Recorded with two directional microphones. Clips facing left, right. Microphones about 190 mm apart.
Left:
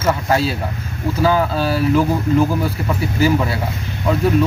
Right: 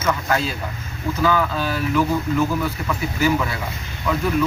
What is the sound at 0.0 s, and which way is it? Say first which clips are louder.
Speech: left 4 dB; 30° left (ahead or behind).